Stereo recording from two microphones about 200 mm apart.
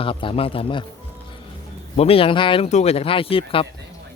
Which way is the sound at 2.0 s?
30° left (ahead or behind).